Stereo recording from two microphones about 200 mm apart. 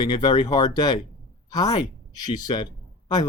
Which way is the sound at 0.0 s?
20° left (ahead or behind).